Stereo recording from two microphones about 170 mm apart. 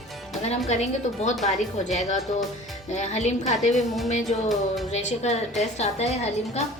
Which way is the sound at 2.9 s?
45° left (ahead or behind).